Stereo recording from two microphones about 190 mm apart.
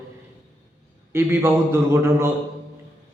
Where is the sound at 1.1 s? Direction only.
10° right (ahead or behind).